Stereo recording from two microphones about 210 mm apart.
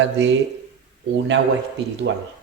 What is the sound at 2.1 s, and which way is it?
Speech, 65° right (ahead or behind).